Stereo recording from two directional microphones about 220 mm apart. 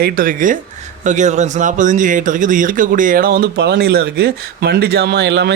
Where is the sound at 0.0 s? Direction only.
40° right (ahead or behind).